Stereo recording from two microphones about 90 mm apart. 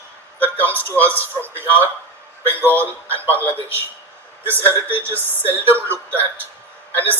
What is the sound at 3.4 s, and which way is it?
Speech, 20° left (ahead or behind).